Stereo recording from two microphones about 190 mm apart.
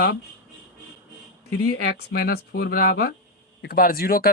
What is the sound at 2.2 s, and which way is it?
Speech, 55° left (ahead or behind).